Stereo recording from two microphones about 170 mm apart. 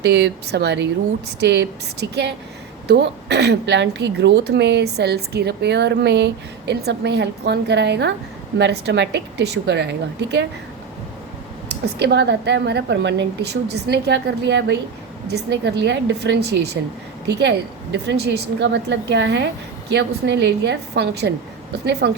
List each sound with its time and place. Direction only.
0.0 s a woman's voice: 80° right
11.7 s a woman's voice: 75° right (ahead or behind)